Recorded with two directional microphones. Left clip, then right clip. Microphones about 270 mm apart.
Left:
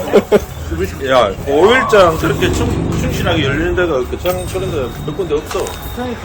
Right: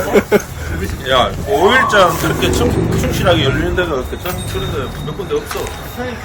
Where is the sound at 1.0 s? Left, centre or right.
Centre.